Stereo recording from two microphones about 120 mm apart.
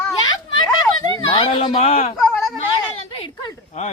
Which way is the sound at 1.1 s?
50° left (ahead or behind).